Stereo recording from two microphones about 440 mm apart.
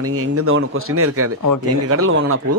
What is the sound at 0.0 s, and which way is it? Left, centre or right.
Speech, right.